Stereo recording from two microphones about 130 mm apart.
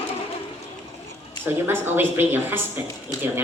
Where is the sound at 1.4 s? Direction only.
15° right (ahead or behind).